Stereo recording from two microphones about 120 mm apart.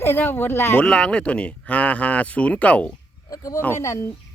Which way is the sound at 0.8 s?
5° left (ahead or behind).